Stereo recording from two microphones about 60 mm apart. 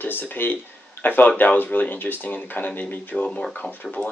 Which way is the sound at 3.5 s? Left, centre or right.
Left.